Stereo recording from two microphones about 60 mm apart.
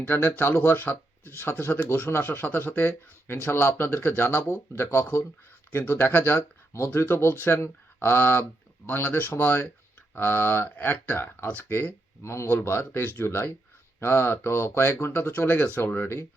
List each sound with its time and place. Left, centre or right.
0.1 s speech: left
2.4 s speech: left
4.8 s speech: left
5.9 s speech: left
10.8 s speech: left
11.1 s speech: left
12.2 s speech: left
12.8 s speech: left